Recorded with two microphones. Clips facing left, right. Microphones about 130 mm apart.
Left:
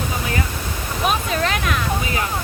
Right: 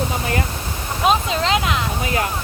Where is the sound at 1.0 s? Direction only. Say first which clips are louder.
Right 3 dB; 25° right (ahead or behind).